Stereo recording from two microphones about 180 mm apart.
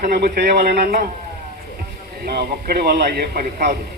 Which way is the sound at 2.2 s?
60° right (ahead or behind).